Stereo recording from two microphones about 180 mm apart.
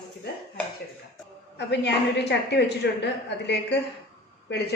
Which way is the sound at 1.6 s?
70° left (ahead or behind).